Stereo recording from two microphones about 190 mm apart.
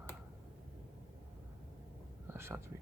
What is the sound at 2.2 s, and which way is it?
Whispering, 15° right (ahead or behind).